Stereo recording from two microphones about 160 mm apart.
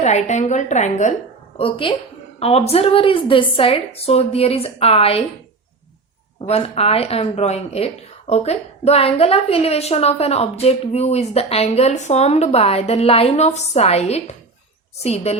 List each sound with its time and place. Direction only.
0.0 s a woman's voice: 45° left (ahead or behind)
1.5 s a woman's voice: 35° left (ahead or behind)
6.5 s a woman's voice: 40° left (ahead or behind)